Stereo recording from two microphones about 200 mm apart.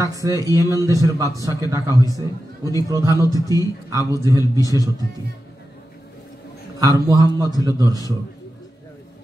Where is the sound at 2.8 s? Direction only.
15° right (ahead or behind).